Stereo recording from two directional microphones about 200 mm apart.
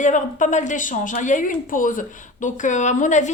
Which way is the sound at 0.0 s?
40° left (ahead or behind).